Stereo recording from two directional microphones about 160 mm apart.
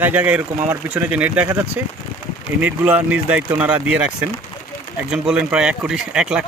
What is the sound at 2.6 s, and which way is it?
Speech, 10° right (ahead or behind).